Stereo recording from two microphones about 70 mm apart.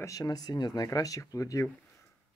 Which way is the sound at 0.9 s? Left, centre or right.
Left.